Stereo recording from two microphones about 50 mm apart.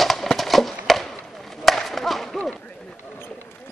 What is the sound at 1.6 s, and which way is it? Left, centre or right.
Chop, centre.